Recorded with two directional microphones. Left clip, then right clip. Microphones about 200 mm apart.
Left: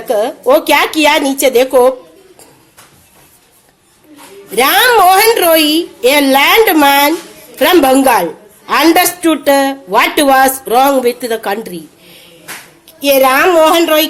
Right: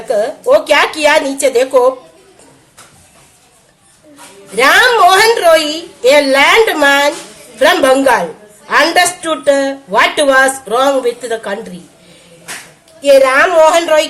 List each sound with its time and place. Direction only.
0.1 s speech: 35° left (ahead or behind)
4.5 s speech: 40° left (ahead or behind)
13.0 s speech: 45° left (ahead or behind)